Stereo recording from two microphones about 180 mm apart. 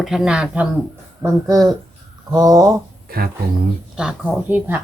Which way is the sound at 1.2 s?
20° right (ahead or behind).